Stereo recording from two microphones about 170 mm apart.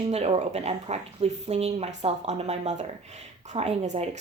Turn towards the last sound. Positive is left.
turn(degrees=-40)  # may be behind; listen again after turning